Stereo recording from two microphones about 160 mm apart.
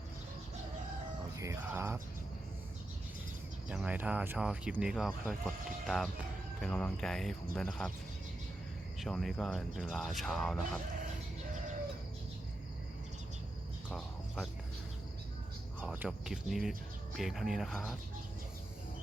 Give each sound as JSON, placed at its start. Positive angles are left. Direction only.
{"t": 1.4, "sound": "music", "side_deg": -15}
{"t": 3.7, "sound": "speech", "side_deg": -5}
{"t": 9.0, "sound": "speech", "side_deg": 0}
{"t": 13.9, "sound": "a sound", "side_deg": 0}
{"t": 15.8, "sound": "speech", "side_deg": -10}